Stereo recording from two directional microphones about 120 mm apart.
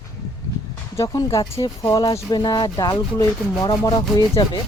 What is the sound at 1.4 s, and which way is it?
Rub, 40° left (ahead or behind).